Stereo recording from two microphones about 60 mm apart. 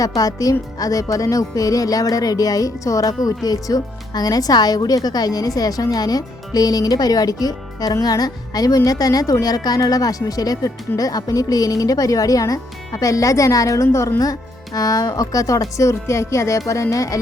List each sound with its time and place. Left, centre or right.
0.2 s a woman's voice: left
14.2 s speech: left